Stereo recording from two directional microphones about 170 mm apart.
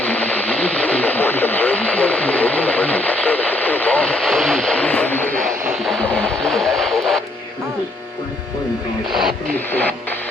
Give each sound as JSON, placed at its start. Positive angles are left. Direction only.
{"t": 0.0, "sound": "radio", "side_deg": 10}
{"t": 5.3, "sound": "a sound", "side_deg": -50}
{"t": 5.7, "sound": "radio", "side_deg": 0}
{"t": 9.5, "sound": "radio", "side_deg": 10}